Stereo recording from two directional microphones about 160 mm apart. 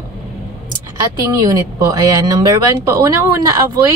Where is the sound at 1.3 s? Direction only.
20° right (ahead or behind).